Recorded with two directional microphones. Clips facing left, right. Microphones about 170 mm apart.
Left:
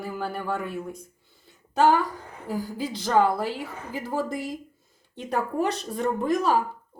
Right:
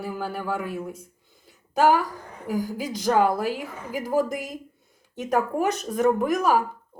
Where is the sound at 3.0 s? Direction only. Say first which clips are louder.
Right 1 dB; 15° right (ahead or behind).